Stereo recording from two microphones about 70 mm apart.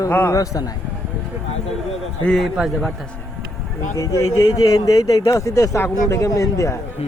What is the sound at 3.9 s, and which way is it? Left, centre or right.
Speech, left.